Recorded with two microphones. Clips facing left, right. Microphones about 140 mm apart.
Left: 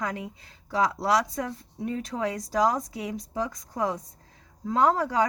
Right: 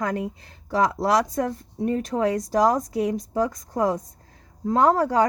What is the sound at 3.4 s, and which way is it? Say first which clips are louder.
Speech: right 5 dB; 45° right (ahead or behind).